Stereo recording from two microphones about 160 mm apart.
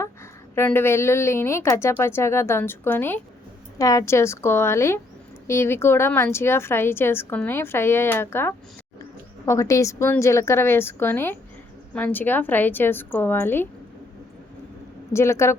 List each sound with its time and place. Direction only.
0.5 s a woman's voice: 15° left (ahead or behind)
15.1 s a woman's voice: 15° left (ahead or behind)